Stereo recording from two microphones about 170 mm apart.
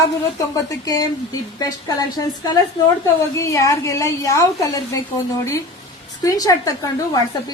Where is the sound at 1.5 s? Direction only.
20° left (ahead or behind).